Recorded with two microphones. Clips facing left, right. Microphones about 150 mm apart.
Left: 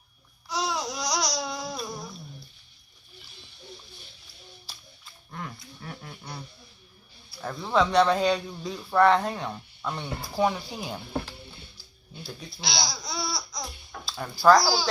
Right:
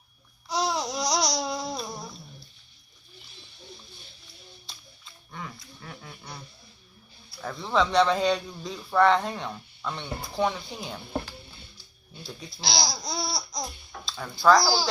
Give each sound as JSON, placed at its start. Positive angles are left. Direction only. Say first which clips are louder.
{"t": 0.5, "sound": "babbling", "louder": "right 2 dB", "side_deg": -30}
{"t": 4.7, "sound": "a sound", "louder": "even", "side_deg": 5}
{"t": 7.4, "sound": "a man's voice", "louder": "left 1 dB", "side_deg": 0}
{"t": 12.2, "sound": "a man's voice", "louder": "even", "side_deg": 0}
{"t": 13.1, "sound": "laughter", "louder": "right 1 dB", "side_deg": -40}
{"t": 14.0, "sound": "speech", "louder": "left 2 dB", "side_deg": 5}